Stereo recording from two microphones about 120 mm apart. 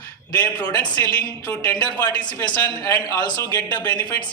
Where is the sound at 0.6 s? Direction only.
30° left (ahead or behind).